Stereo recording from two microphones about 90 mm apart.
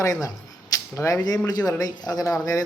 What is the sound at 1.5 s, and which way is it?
A man's voice, 40° left (ahead or behind).